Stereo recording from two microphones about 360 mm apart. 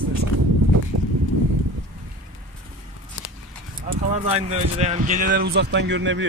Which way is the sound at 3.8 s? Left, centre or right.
Centre.